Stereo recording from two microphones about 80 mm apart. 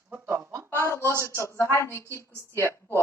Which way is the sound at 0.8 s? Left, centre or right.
Left.